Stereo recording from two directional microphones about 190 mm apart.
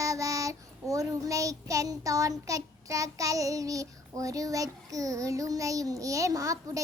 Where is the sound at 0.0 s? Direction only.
15° right (ahead or behind).